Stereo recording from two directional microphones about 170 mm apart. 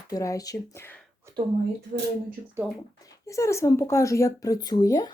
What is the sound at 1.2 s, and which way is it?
Speech, 15° right (ahead or behind).